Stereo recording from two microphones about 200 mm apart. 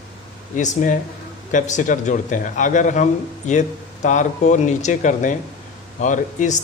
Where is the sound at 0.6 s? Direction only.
40° left (ahead or behind).